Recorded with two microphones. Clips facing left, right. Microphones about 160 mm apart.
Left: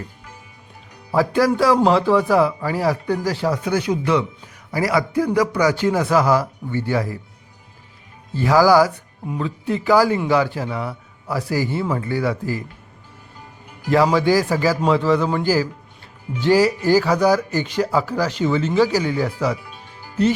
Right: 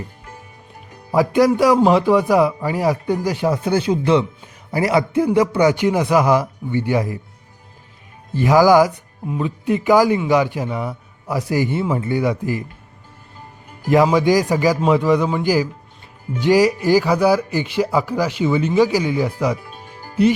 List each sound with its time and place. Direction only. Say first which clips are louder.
1.1 s speech: right 3 dB; 15° right (ahead or behind)
8.3 s speech: right 2 dB; 15° right (ahead or behind)
13.9 s speech: right 2 dB; 15° right (ahead or behind)
19.7 s music: right 3 dB; 45° right (ahead or behind)